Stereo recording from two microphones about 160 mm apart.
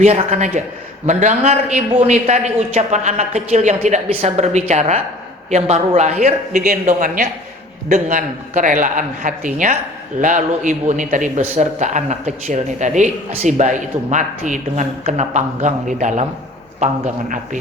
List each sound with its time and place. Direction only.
0.0 s a man's voice: 45° right (ahead or behind)